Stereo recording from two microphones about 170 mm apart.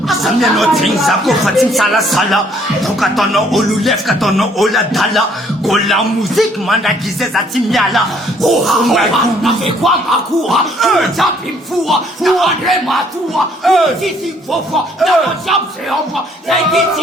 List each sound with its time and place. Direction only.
0.1 s speech: centre (ahead or behind)